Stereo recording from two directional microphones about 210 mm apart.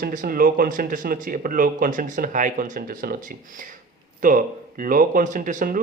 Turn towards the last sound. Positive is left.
turn(degrees=-40)  # may be behind; listen again after turning